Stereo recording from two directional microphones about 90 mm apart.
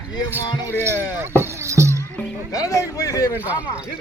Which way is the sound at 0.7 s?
30° right (ahead or behind).